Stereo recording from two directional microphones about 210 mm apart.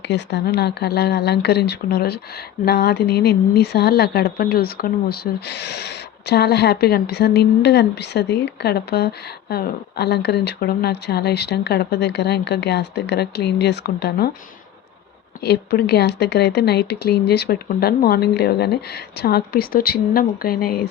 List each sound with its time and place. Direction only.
0.1 s speech: 55° left (ahead or behind)
15.4 s speech: 50° left (ahead or behind)